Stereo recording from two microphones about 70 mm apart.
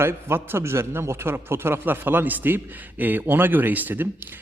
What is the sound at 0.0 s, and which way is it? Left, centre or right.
A man's voice, right.